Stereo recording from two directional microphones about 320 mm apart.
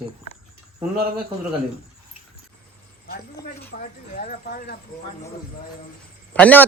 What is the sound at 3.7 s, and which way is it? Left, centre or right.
Speech, left.